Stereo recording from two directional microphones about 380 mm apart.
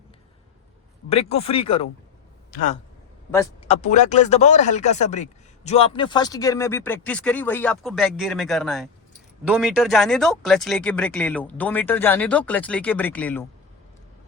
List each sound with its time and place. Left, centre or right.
1.1 s a man's voice: centre